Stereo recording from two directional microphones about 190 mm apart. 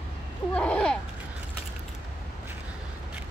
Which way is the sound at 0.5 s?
5° left (ahead or behind).